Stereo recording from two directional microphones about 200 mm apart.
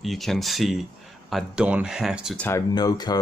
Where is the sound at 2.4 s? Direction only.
15° left (ahead or behind).